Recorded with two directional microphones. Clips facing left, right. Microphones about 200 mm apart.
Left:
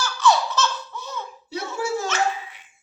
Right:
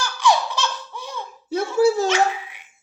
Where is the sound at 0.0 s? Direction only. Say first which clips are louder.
Even; 15° right (ahead or behind).